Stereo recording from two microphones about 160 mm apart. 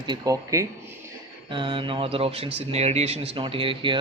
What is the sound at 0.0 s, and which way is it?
Speech, 25° right (ahead or behind).